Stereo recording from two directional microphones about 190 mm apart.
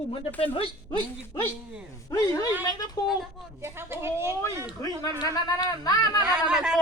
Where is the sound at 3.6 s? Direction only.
10° right (ahead or behind).